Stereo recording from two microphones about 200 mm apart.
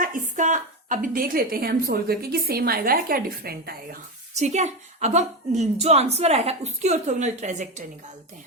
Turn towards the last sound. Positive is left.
turn(degrees=-35)  # may be behind; listen again after turning